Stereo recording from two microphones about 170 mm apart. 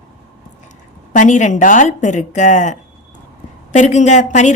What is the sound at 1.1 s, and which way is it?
Speech, 45° left (ahead or behind).